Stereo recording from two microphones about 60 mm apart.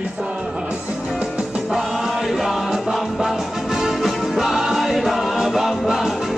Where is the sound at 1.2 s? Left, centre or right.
Centre.